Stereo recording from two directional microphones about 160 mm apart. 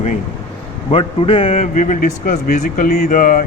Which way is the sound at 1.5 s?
50° left (ahead or behind).